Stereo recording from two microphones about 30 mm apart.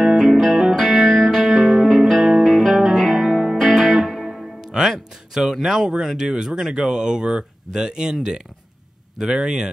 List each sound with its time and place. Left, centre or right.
0.3 s music: centre
5.7 s speech: centre